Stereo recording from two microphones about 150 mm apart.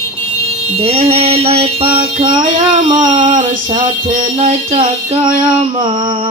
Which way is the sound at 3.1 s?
60° right (ahead or behind).